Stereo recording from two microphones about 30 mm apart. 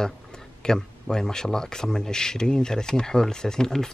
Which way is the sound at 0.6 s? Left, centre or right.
Centre.